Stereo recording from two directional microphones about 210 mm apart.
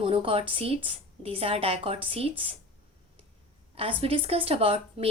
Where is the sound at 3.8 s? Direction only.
25° right (ahead or behind).